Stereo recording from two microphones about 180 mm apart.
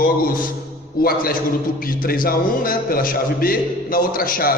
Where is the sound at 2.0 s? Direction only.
55° left (ahead or behind).